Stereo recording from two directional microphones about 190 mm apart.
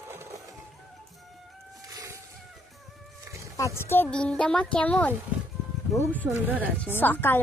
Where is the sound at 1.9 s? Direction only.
20° right (ahead or behind).